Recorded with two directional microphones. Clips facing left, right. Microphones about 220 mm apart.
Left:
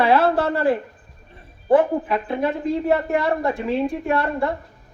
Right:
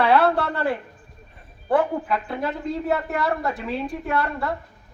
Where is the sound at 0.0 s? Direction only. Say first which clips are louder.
Left 1 dB; 25° left (ahead or behind).